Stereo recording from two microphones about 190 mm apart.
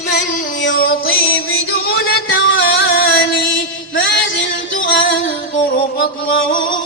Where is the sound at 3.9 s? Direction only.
80° left.